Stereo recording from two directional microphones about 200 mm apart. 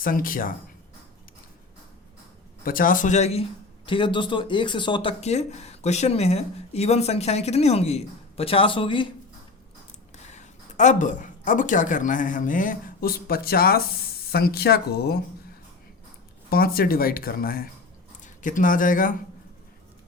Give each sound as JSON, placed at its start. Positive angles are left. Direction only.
{"t": 0.0, "sound": "speech", "side_deg": 45}
{"t": 2.6, "sound": "speech", "side_deg": 45}
{"t": 10.2, "sound": "speech", "side_deg": 35}
{"t": 16.5, "sound": "speech", "side_deg": 50}